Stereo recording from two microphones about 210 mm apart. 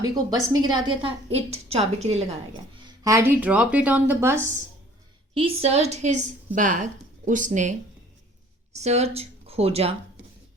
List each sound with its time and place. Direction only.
0.0 s a woman's voice: 15° right (ahead or behind)
2.7 s speech: 20° right (ahead or behind)
5.3 s a woman's voice: 25° right (ahead or behind)